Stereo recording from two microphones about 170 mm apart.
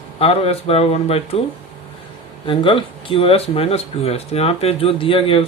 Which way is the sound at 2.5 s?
30° left (ahead or behind).